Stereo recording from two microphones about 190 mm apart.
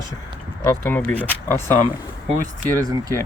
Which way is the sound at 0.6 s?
10° left (ahead or behind).